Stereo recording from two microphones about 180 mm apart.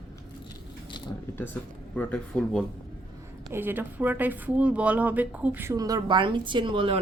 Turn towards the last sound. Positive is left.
turn(degrees=-30)  # may be behind; listen again after turning